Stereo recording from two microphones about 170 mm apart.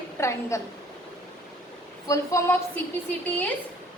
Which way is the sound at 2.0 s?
15° left (ahead or behind).